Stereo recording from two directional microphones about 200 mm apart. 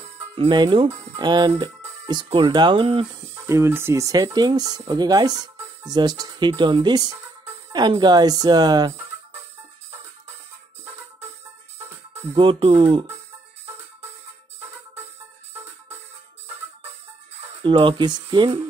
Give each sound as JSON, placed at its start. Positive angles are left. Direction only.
{"t": 0.4, "sound": "speech", "side_deg": -20}
{"t": 3.3, "sound": "speech", "side_deg": -15}
{"t": 12.4, "sound": "speech", "side_deg": -25}
{"t": 17.6, "sound": "speech", "side_deg": -25}